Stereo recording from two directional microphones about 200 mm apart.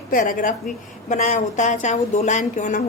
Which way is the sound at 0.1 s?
40° left (ahead or behind).